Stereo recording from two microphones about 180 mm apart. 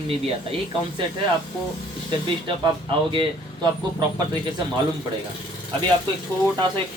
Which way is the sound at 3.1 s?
25° right (ahead or behind).